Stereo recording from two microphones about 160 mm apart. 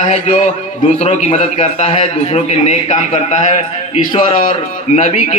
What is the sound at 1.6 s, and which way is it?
A man's voice, 45° left (ahead or behind).